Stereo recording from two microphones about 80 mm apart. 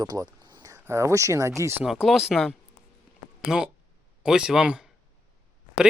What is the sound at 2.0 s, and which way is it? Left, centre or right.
Speech, centre.